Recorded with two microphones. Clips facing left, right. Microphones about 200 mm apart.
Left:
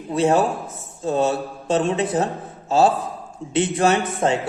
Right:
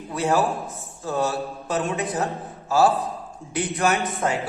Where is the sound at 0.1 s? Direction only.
25° left (ahead or behind).